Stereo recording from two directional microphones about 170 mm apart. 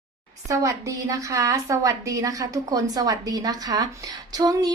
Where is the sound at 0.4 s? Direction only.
20° right (ahead or behind).